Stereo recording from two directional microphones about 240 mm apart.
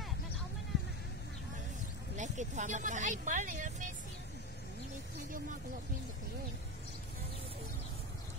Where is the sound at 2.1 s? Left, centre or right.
Right.